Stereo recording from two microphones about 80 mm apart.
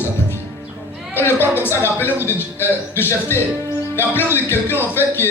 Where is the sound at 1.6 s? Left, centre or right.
Left.